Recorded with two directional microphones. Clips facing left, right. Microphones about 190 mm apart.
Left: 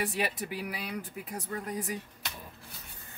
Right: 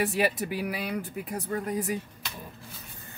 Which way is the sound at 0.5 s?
65° right (ahead or behind).